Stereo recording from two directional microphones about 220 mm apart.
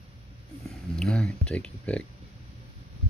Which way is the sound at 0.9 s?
5° left (ahead or behind).